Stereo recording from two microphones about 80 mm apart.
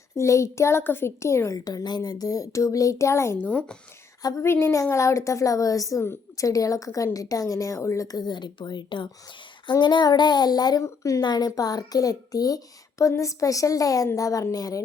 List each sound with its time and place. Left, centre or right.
0.2 s a woman's voice: left
1.5 s a woman's voice: left
4.2 s speech: left
4.4 s a woman's voice: left
9.8 s child singing: left
10.8 s a woman's voice: left
11.2 s a woman's voice: left